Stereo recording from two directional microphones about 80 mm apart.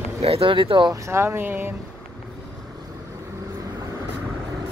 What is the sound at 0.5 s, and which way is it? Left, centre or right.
Speech, right.